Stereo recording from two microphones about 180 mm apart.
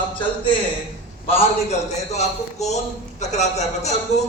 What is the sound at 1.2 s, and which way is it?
Speech, 35° left (ahead or behind).